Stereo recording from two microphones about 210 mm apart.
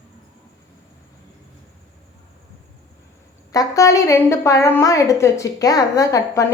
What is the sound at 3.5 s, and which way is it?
A woman's voice, 15° left (ahead or behind).